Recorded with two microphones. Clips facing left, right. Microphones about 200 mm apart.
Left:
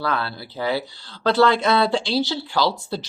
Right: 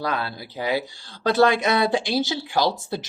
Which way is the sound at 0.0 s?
15° right (ahead or behind).